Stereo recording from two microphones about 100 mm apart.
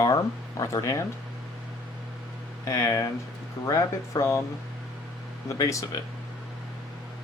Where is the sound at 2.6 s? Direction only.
35° left (ahead or behind).